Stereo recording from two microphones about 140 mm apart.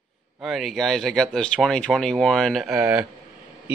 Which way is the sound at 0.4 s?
Centre (ahead or behind).